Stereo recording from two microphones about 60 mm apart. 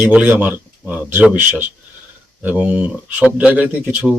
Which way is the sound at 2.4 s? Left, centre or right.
Right.